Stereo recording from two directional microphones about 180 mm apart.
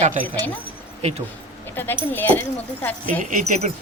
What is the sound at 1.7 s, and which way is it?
Speech, 10° left (ahead or behind).